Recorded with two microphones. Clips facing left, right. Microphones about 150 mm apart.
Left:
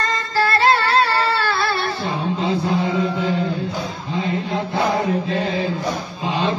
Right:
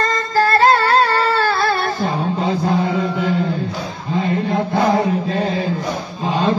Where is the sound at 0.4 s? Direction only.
40° right (ahead or behind).